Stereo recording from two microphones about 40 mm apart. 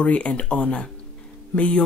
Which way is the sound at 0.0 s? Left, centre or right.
Left.